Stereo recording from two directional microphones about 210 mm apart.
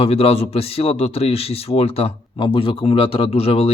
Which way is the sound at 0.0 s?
30° left (ahead or behind).